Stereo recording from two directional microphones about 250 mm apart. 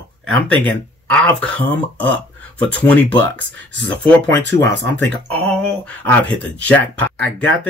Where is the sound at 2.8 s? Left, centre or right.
Centre.